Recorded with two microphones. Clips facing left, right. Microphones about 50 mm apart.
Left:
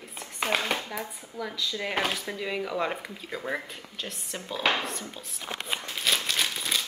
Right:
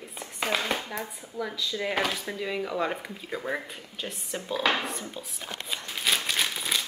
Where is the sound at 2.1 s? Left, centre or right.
Centre.